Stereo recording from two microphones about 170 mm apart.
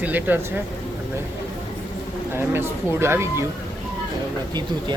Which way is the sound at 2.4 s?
15° right (ahead or behind).